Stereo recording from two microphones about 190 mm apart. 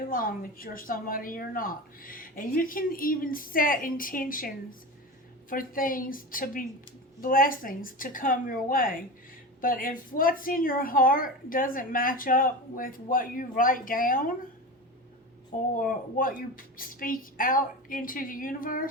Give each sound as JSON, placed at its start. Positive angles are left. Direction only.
{"t": 0.1, "sound": "a woman's voice", "side_deg": 50}
{"t": 15.5, "sound": "a woman's voice", "side_deg": 45}